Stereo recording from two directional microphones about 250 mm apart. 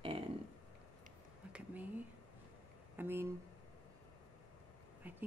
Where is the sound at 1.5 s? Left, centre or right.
Centre.